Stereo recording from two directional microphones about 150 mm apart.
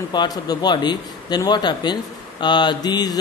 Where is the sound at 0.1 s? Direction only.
25° left (ahead or behind).